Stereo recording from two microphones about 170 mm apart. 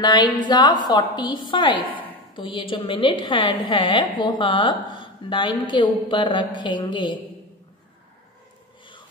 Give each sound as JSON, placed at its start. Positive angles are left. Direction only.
{"t": 0.0, "sound": "a woman's voice", "side_deg": 25}